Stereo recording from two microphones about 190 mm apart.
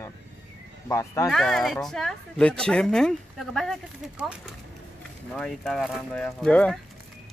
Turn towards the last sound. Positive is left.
turn(degrees=5)  # may be behind; listen again after turning